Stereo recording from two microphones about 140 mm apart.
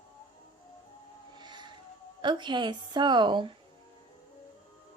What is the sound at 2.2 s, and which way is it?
A woman's voice, 35° right (ahead or behind).